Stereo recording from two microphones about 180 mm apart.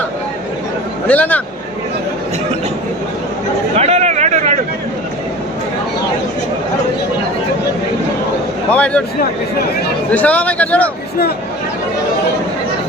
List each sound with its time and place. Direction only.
1.0 s speech: 10° left (ahead or behind)
3.8 s a sound: 35° right (ahead or behind)
8.7 s speech: 5° left (ahead or behind)
10.1 s speech: 10° left (ahead or behind)